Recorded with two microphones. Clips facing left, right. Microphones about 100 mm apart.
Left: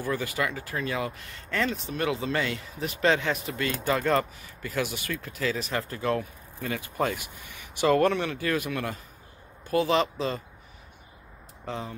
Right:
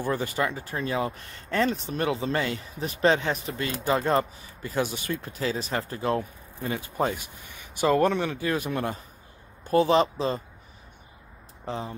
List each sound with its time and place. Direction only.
0.0 s speech: 30° right (ahead or behind)
11.6 s speech: 20° right (ahead or behind)